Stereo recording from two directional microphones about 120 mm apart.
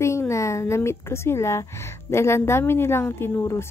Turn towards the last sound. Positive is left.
turn(degrees=20)  # may be behind; listen again after turning